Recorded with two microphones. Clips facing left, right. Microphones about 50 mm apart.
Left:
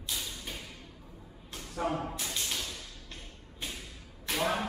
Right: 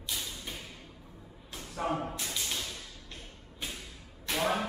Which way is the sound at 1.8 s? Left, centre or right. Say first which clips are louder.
Even; centre.